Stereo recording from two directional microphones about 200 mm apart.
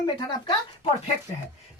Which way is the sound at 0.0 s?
20° left (ahead or behind).